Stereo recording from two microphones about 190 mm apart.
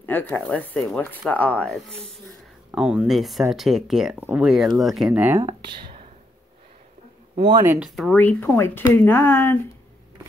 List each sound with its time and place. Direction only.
0.0 s speech: 10° left (ahead or behind)
2.7 s speech: 5° right (ahead or behind)
7.3 s speech: 25° right (ahead or behind)
7.6 s speech: 10° right (ahead or behind)
7.9 s speech: centre (ahead or behind)